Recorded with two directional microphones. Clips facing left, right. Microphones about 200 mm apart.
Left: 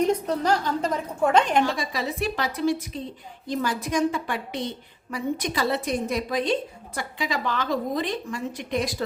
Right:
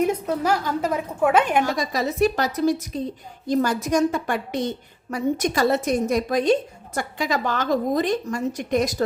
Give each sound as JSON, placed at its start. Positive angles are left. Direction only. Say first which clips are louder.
{"t": 0.0, "sound": "a woman's voice", "louder": "right 1 dB", "side_deg": -10}
{"t": 1.6, "sound": "a woman's voice", "louder": "right 3 dB", "side_deg": -45}